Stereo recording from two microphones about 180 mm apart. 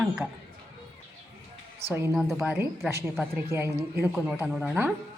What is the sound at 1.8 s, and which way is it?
Speech, 35° right (ahead or behind).